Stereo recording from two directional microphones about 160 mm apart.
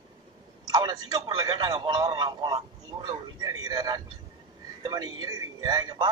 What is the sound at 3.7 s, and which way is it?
A man's voice, 25° right (ahead or behind).